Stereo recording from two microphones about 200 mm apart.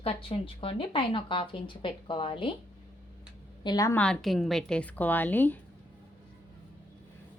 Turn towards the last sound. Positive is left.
turn(degrees=10)  # may be behind; listen again after turning